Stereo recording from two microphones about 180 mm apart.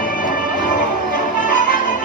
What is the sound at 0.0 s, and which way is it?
Music, 50° left (ahead or behind).